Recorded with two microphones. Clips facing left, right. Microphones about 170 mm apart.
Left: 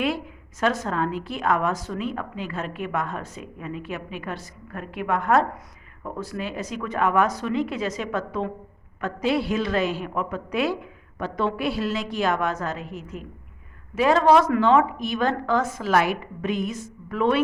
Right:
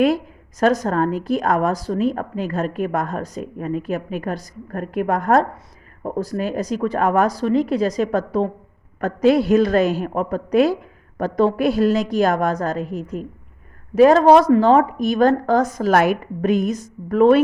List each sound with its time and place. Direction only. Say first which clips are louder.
0.6 s a woman's voice: right 7 dB; 40° right (ahead or behind)